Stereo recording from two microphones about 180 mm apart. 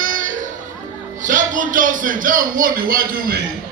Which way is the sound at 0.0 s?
50° right (ahead or behind).